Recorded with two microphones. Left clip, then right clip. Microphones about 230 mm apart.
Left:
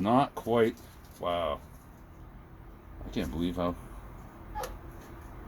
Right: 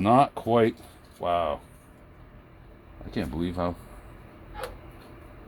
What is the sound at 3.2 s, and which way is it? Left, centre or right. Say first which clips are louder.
Speech: right 3 dB; right.